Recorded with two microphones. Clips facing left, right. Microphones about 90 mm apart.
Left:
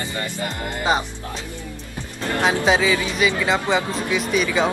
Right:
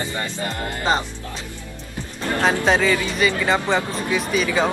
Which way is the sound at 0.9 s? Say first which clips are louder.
Even; 10° left (ahead or behind).